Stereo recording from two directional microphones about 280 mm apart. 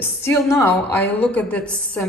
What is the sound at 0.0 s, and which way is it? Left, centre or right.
A woman's voice, centre.